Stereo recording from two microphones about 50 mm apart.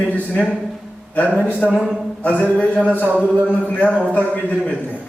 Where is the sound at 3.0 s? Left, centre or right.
Right.